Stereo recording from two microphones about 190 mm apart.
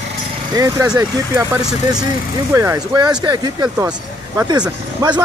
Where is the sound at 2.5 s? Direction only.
15° right (ahead or behind).